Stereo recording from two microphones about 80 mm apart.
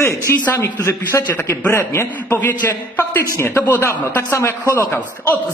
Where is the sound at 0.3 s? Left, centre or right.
Left.